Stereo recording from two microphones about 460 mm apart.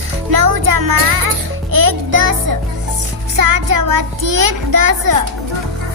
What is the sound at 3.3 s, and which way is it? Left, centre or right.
A child's voice, right.